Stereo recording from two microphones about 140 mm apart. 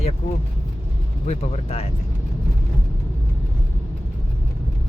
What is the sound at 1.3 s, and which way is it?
Speech, 50° left (ahead or behind).